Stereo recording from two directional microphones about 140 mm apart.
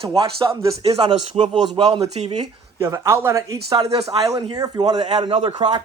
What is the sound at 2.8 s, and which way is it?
Speech, 20° right (ahead or behind).